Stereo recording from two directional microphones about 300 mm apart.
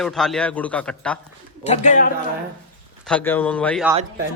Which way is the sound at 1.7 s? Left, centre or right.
Left.